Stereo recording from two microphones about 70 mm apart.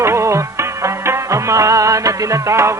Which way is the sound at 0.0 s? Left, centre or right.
Right.